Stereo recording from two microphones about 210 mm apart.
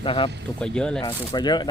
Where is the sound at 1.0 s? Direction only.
20° left (ahead or behind).